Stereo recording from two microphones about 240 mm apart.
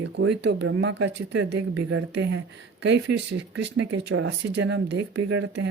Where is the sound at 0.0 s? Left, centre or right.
Right.